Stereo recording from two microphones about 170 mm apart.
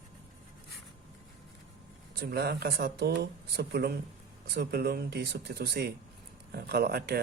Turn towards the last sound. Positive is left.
turn(degrees=-65)  # may be behind; listen again after turning